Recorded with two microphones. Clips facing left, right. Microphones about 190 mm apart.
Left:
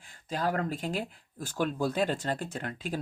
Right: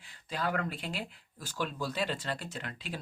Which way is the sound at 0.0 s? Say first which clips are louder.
Left 4 dB; 45° left (ahead or behind).